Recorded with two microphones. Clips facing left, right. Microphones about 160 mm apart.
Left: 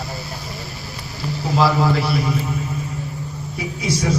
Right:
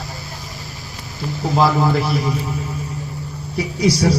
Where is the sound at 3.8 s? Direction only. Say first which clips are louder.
Right 5 dB; 35° right (ahead or behind).